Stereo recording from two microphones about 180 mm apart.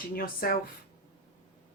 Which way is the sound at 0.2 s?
55° left (ahead or behind).